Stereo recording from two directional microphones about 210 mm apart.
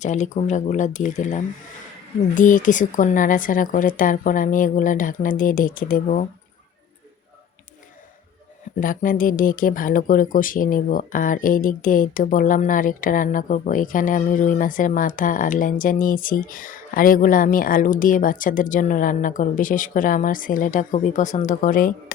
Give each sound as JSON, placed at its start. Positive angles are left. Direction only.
{"t": 0.0, "sound": "speech", "side_deg": 35}
{"t": 8.8, "sound": "speech", "side_deg": 40}